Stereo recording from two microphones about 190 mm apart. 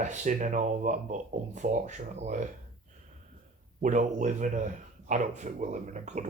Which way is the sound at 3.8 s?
40° right (ahead or behind).